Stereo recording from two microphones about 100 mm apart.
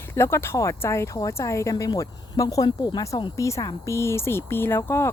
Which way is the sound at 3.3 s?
30° left (ahead or behind).